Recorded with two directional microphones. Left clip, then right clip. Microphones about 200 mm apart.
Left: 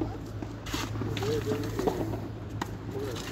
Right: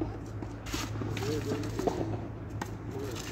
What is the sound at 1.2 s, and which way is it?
Vehicle, 20° right (ahead or behind).